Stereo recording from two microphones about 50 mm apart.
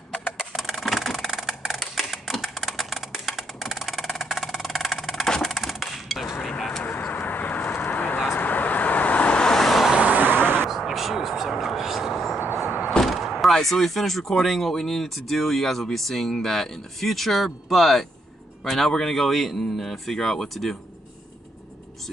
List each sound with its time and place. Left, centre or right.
0.5 s a sound: centre
5.0 s percussion: centre
5.4 s a sound: centre
6.8 s vehicle: left
7.7 s a sound: left
8.3 s vehicle: left
9.4 s vehicle: centre
9.9 s vehicle: right
10.4 s vehicle: right
10.7 s vehicle: centre
12.5 s a sound: centre
12.9 s speech: centre